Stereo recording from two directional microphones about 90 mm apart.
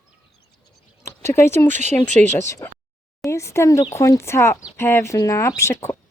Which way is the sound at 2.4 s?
35° left (ahead or behind).